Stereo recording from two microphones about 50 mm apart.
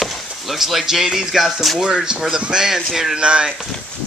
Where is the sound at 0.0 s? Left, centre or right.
Centre.